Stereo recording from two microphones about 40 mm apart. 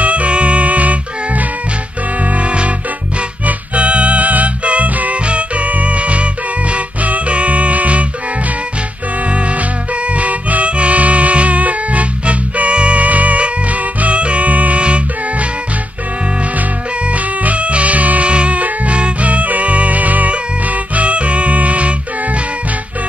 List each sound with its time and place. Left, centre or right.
0.0 s music: right
9.3 s music: right
17.1 s music: right